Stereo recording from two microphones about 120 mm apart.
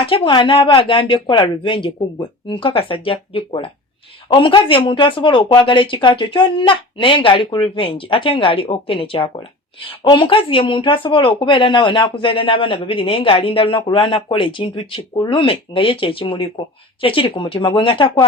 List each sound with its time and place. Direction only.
0.0 s speech: 45° left (ahead or behind)